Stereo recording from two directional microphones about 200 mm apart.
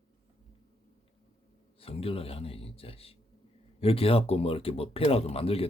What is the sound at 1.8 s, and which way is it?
Speech, 30° left (ahead or behind).